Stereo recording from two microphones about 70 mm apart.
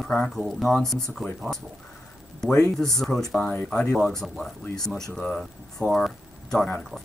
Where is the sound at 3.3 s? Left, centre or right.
Left.